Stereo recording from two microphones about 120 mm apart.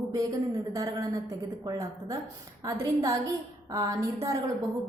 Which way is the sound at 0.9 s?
30° right (ahead or behind).